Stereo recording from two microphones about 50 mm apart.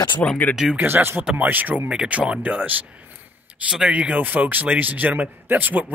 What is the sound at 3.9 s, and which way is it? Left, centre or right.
A man's voice, right.